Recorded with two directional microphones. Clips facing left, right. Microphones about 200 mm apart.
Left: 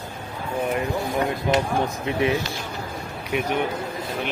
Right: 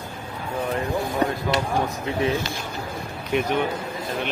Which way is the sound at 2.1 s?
15° left (ahead or behind).